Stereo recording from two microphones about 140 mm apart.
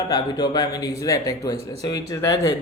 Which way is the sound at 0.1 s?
30° left (ahead or behind).